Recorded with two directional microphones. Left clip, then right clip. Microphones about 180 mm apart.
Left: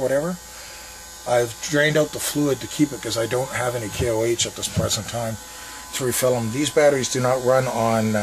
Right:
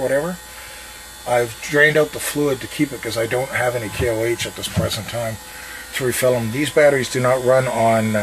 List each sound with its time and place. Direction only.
0.0 s speech: 10° left (ahead or behind)
5.9 s speech: centre (ahead or behind)